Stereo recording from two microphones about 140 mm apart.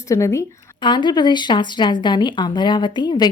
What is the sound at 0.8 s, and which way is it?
A woman's voice, 35° left (ahead or behind).